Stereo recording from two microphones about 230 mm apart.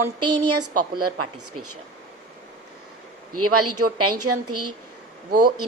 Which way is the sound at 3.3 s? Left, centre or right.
Right.